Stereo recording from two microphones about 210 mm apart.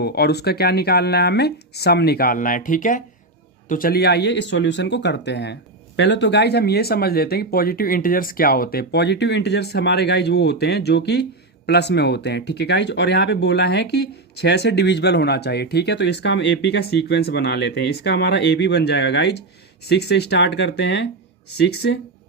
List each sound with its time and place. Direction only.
0.0 s speech: 50° left (ahead or behind)